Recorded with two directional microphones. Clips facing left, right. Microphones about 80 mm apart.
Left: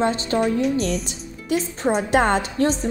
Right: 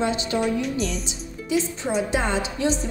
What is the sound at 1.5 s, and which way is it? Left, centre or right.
A woman's voice, left.